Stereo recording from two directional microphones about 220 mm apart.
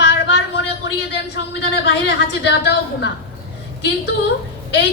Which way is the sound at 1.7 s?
50° left (ahead or behind).